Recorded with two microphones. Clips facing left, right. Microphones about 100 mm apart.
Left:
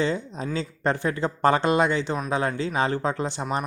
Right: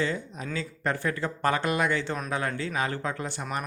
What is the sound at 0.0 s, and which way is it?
Speech, 25° left (ahead or behind).